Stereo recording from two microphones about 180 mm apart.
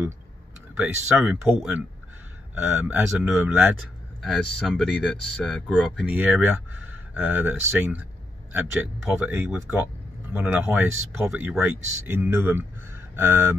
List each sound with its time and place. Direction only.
0.7 s speech: 5° right (ahead or behind)
6.0 s speech: 10° right (ahead or behind)